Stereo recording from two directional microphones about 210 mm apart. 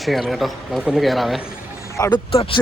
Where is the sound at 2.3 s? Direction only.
25° left (ahead or behind).